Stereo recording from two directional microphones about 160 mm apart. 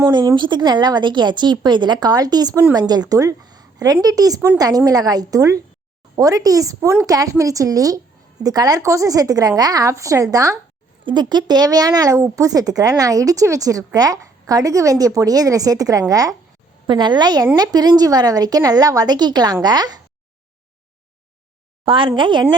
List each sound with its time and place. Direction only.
0.1 s a woman's voice: 30° right (ahead or behind)
21.8 s speech: 30° right (ahead or behind)